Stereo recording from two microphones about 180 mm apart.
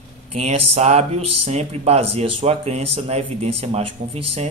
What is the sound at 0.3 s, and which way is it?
A man's voice, 35° right (ahead or behind).